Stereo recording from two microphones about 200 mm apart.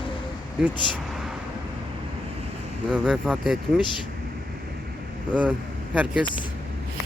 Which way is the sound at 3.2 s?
5° right (ahead or behind).